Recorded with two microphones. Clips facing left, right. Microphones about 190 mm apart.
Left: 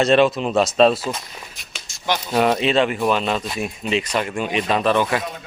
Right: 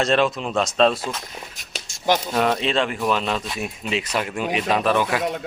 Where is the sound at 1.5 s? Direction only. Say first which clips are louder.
Right 3 dB; 45° right (ahead or behind).